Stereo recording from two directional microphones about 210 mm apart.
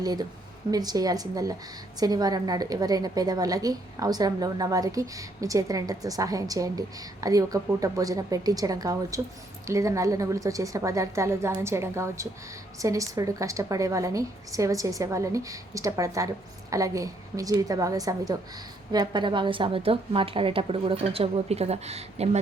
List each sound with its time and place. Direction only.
0.0 s a woman's voice: 20° right (ahead or behind)